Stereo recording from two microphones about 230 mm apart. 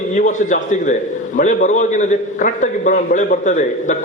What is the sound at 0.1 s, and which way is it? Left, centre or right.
A man's voice, left.